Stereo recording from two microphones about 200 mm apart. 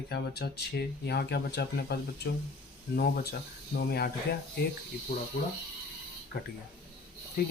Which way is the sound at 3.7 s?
55° left (ahead or behind).